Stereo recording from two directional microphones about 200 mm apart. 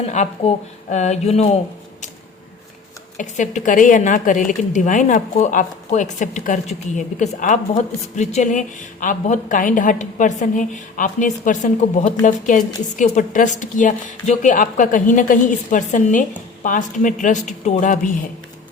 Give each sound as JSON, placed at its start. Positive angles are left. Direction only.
{"t": 0.1, "sound": "a woman's voice", "side_deg": 35}
{"t": 3.2, "sound": "a woman's voice", "side_deg": 40}